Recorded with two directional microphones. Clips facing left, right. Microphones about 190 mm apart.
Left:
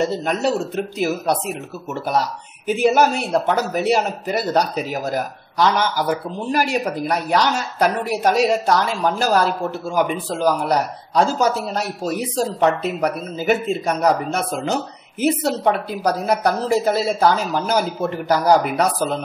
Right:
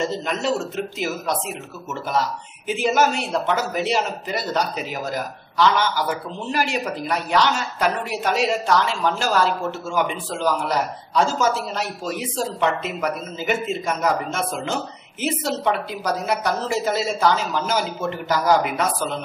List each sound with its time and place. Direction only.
0.0 s a man's voice: 40° left (ahead or behind)